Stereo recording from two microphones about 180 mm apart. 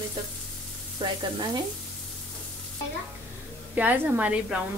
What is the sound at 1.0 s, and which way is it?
Frying, 30° right (ahead or behind).